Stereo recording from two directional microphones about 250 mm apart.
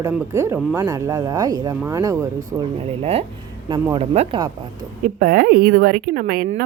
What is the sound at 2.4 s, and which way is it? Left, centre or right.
Speech, right.